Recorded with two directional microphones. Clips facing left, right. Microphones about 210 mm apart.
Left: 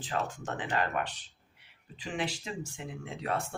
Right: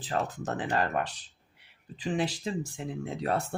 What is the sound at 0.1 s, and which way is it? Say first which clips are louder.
Speech: right 3 dB; 35° right (ahead or behind).